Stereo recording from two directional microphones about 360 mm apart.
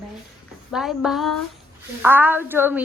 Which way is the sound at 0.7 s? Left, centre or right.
Centre.